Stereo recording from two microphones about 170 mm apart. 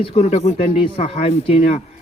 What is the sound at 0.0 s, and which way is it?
A man's voice, 40° left (ahead or behind).